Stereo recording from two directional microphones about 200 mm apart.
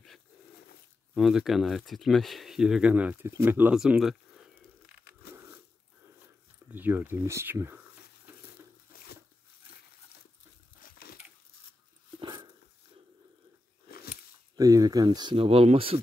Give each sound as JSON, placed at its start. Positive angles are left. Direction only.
{"t": 1.1, "sound": "speech", "side_deg": 0}
{"t": 5.3, "sound": "biting", "side_deg": -10}
{"t": 6.7, "sound": "speech", "side_deg": -10}
{"t": 8.9, "sound": "tearing", "side_deg": 50}
{"t": 10.8, "sound": "a sound", "side_deg": 50}
{"t": 12.2, "sound": "a sound", "side_deg": -20}
{"t": 13.8, "sound": "biting", "side_deg": 50}
{"t": 14.6, "sound": "speech", "side_deg": -15}